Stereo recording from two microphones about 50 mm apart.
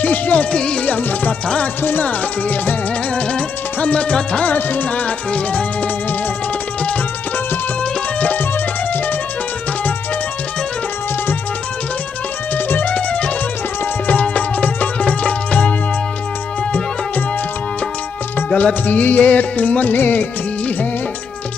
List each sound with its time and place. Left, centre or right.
0.0 s music: left
0.8 s music: left
1.8 s music: left
2.0 s music: left
3.2 s music: left
4.6 s music: left
8.2 s music: left
12.5 s music: left
14.2 s music: left
18.5 s music: left
20.0 s music of bollywood: left